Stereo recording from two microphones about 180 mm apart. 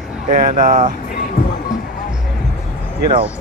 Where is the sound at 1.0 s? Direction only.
55° left (ahead or behind).